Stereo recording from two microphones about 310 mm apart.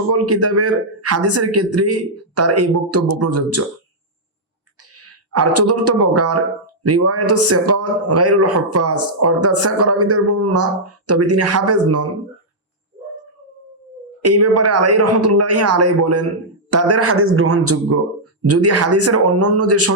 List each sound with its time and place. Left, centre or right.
0.3 s a man's voice: right
4.9 s a man's voice: right
14.2 s a man's voice: right